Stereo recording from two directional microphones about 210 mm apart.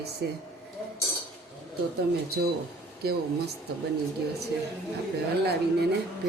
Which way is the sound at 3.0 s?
50° right (ahead or behind).